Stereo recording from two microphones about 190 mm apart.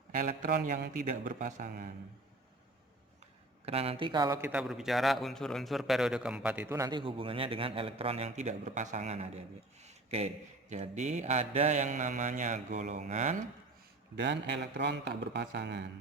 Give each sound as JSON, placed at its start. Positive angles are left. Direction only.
{"t": 0.2, "sound": "a man's voice", "side_deg": -45}
{"t": 3.7, "sound": "a man's voice", "side_deg": -30}
{"t": 9.8, "sound": "mantra", "side_deg": -35}
{"t": 14.2, "sound": "speech", "side_deg": -65}